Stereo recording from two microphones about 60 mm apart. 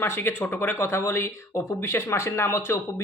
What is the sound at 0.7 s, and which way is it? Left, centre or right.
Speech, left.